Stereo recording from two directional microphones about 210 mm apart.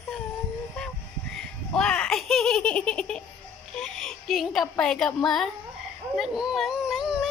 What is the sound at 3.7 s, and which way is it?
Speech, centre (ahead or behind).